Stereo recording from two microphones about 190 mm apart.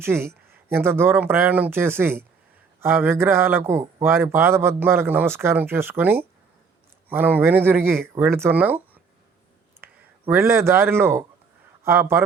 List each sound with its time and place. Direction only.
0.0 s speech: 10° right (ahead or behind)
9.8 s a man's voice: 10° right (ahead or behind)